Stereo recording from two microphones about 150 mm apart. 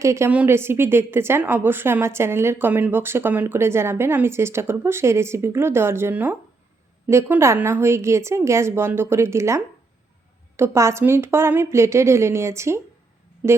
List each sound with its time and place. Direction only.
0.0 s a woman's voice: 20° right (ahead or behind)